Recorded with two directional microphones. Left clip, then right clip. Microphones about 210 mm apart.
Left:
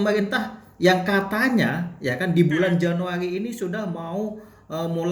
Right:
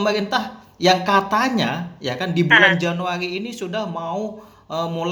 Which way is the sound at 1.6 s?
15° left (ahead or behind).